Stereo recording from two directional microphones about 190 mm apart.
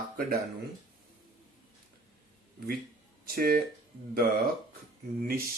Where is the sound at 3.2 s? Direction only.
55° right (ahead or behind).